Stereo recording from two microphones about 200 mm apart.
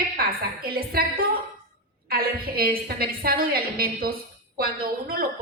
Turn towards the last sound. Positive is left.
turn(degrees=-50)  # may be behind; listen again after turning